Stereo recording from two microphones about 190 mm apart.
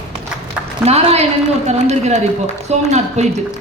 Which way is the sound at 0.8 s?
35° right (ahead or behind).